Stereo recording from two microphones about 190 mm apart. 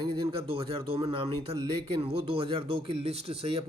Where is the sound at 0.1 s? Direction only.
30° right (ahead or behind).